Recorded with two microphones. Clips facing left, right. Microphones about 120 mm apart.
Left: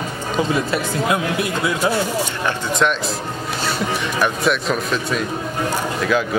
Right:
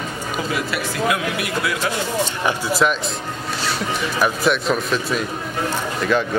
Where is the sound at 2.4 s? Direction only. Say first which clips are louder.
Right 1 dB; 5° right (ahead or behind).